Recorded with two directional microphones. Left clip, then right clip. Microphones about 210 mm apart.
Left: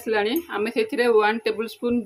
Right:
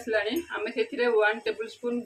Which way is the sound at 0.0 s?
50° left (ahead or behind).